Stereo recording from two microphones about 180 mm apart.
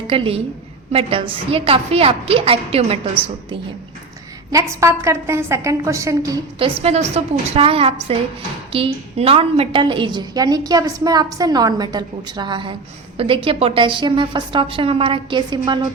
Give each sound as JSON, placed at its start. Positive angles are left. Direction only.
{"t": 0.1, "sound": "a woman's voice", "side_deg": -30}
{"t": 4.5, "sound": "a woman's voice", "side_deg": -15}
{"t": 6.8, "sound": "a woman's voice", "side_deg": -35}